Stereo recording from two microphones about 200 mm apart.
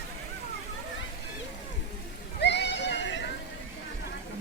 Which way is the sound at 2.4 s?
60° left (ahead or behind).